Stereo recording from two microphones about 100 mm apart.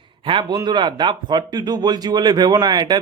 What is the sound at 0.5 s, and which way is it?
Speech, 45° right (ahead or behind).